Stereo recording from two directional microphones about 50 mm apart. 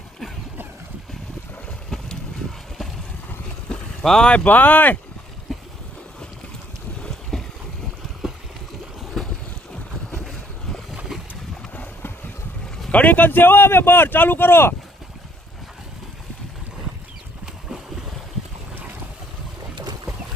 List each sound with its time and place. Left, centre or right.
1.9 s boat: centre
4.0 s speech: centre
4.4 s speech: left
5.5 s boat: centre
7.0 s boat: centre
9.0 s boat: centre
11.1 s boat: centre
12.9 s speech: left